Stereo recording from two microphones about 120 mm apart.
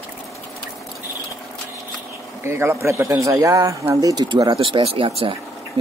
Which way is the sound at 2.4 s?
20° right (ahead or behind).